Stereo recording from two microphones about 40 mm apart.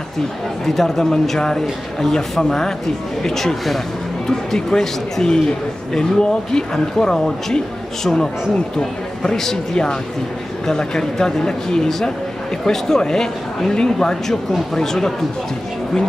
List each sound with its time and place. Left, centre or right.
0.7 s speech: centre
10.7 s speech: centre